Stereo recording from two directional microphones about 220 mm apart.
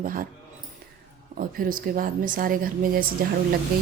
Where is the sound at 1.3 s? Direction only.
40° right (ahead or behind).